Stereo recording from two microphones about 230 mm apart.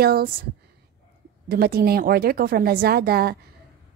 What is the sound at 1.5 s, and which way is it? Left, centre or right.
Speech, right.